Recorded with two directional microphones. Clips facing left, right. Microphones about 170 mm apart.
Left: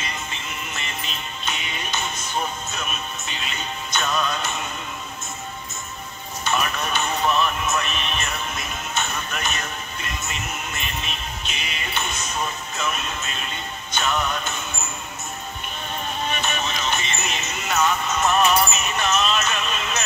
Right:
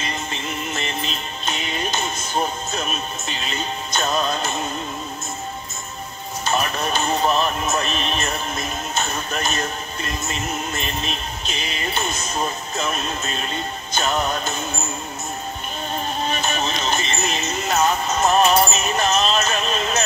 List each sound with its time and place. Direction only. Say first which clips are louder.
0.7 s music: right 6 dB; 40° right (ahead or behind)
6.4 s a sound: right 2 dB; 35° right (ahead or behind)
16.3 s music: right 2 dB; 35° right (ahead or behind)